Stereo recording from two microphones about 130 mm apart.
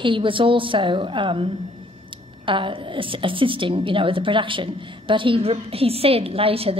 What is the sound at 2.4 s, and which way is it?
A woman's voice, 40° right (ahead or behind).